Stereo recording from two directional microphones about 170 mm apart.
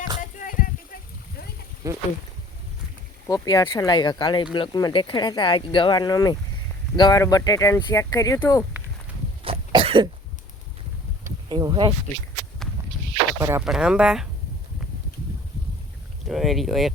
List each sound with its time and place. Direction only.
0.2 s a sound: 50° left (ahead or behind)
1.8 s speech: 20° right (ahead or behind)
3.2 s speech: 20° left (ahead or behind)
9.4 s cough: 35° right (ahead or behind)
11.4 s speech: 30° right (ahead or behind)
13.4 s speech: 15° right (ahead or behind)
13.7 s speech: 5° right (ahead or behind)
16.3 s speech: centre (ahead or behind)